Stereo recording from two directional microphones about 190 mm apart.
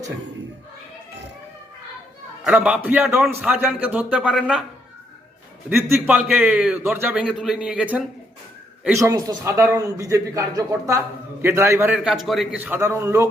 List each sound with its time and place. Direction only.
2.4 s a man's voice: 5° right (ahead or behind)
5.6 s a man's voice: 10° right (ahead or behind)
9.0 s a man's voice: 15° right (ahead or behind)
11.9 s a man's voice: centre (ahead or behind)